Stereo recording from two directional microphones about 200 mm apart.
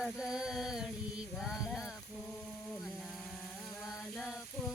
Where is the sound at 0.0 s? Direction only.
Centre (ahead or behind).